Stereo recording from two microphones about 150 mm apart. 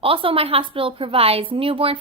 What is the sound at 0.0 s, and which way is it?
Speech, 35° right (ahead or behind).